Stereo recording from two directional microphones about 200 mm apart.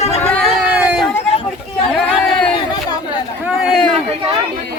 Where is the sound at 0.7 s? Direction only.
5° right (ahead or behind).